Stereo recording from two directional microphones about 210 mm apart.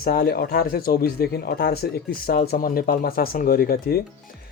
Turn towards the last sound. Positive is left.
turn(degrees=45)  # may be behind; listen again after turning